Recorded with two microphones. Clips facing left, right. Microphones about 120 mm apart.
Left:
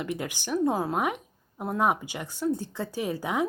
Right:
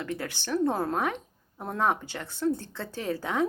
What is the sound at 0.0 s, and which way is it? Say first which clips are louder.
Speech: left 2 dB; 15° left (ahead or behind).